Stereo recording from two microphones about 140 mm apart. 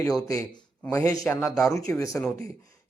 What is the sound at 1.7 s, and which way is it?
Speech, 20° left (ahead or behind).